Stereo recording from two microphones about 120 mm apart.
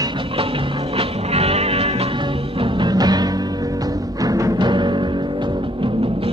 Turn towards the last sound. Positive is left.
turn(degrees=-40)  # may be behind; listen again after turning